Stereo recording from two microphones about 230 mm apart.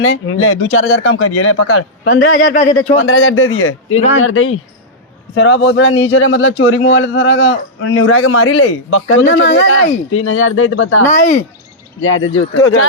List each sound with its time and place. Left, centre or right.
0.0 s a man's voice: left
2.5 s speech: left
2.9 s a man's voice: left
11.0 s speech: left
11.9 s a man's voice: left